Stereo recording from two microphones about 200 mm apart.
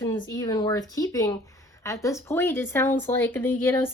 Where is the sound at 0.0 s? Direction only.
15° left (ahead or behind).